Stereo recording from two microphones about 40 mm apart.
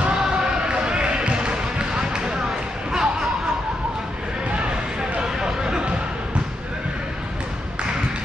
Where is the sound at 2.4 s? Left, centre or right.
Centre.